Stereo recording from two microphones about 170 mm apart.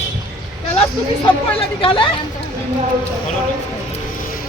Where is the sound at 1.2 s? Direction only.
30° left (ahead or behind).